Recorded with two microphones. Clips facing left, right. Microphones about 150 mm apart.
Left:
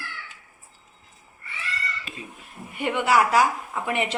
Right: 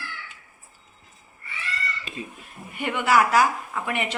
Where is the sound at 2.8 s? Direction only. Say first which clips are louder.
Even; 25° left (ahead or behind).